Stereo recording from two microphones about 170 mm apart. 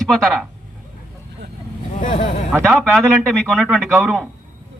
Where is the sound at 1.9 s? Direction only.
50° left (ahead or behind).